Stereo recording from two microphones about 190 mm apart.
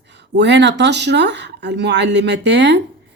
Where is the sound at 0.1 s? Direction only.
65° right (ahead or behind).